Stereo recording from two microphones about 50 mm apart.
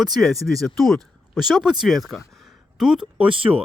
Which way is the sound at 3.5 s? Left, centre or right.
Right.